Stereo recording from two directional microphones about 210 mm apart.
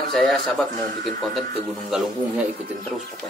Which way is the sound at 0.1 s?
Centre (ahead or behind).